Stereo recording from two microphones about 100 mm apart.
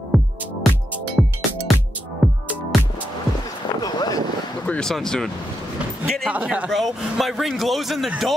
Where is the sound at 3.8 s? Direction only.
40° left (ahead or behind).